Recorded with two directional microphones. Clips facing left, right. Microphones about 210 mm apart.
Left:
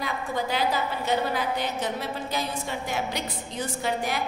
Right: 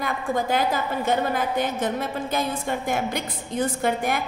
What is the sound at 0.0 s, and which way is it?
A woman's voice, 50° right (ahead or behind).